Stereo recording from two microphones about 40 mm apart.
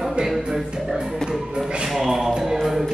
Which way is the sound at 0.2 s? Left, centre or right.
Right.